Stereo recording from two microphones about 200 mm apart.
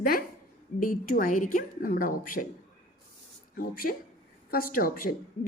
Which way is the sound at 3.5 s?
45° left (ahead or behind).